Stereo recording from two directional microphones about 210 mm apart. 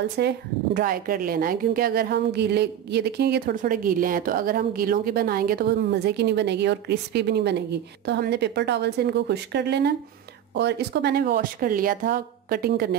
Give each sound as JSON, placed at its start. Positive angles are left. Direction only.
{"t": 0.2, "sound": "a woman's voice", "side_deg": -50}